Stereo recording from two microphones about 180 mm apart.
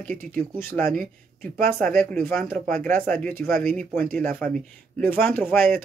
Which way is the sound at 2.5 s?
50° right (ahead or behind).